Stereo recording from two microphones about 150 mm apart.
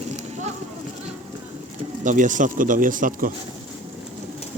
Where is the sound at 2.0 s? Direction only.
55° right (ahead or behind).